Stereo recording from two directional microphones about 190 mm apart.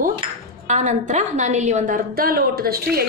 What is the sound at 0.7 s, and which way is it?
A woman's voice, 40° right (ahead or behind).